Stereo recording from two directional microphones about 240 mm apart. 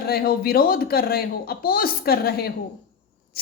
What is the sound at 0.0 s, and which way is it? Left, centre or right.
A woman's voice, left.